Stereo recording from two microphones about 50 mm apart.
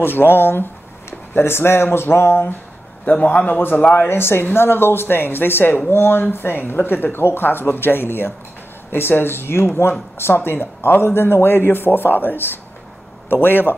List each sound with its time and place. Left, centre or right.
0.0 s a man's voice: left
3.1 s a man's voice: left
3.4 s a man's voice: left